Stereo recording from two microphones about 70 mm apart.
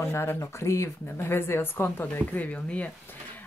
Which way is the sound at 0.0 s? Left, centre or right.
Left.